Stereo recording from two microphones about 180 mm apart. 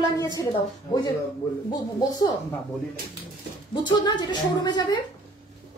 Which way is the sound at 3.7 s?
25° left (ahead or behind).